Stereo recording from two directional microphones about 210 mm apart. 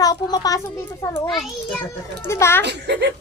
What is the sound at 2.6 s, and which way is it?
Speech, 55° right (ahead or behind).